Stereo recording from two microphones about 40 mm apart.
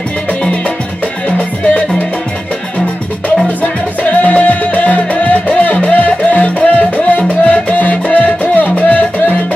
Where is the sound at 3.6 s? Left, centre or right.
Left.